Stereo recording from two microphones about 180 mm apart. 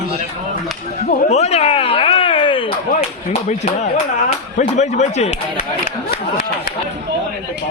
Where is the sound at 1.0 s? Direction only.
35° left (ahead or behind).